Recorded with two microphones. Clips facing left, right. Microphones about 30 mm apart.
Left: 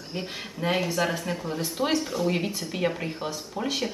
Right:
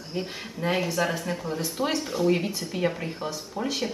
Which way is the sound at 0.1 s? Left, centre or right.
Centre.